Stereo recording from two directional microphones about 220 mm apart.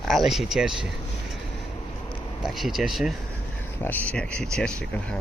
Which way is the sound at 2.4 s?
Centre (ahead or behind).